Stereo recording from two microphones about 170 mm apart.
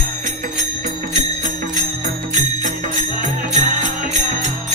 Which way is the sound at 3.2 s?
45° right (ahead or behind).